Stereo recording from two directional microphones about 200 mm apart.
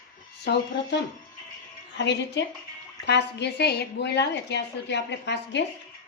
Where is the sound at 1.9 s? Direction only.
60° left (ahead or behind).